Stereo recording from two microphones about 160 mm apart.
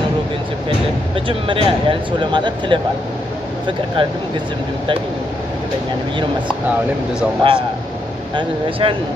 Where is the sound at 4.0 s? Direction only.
35° right (ahead or behind).